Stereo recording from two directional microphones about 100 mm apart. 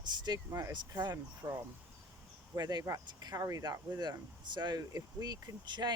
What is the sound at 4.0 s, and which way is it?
Speech, 45° right (ahead or behind).